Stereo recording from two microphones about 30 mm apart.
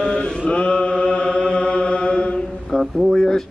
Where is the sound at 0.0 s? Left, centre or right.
Left.